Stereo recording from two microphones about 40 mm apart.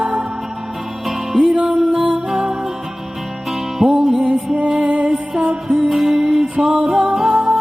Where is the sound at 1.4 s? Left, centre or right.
Right.